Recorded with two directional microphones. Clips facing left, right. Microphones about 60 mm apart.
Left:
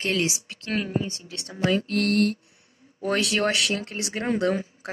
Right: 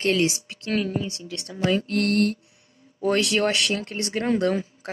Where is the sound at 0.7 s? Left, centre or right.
Centre.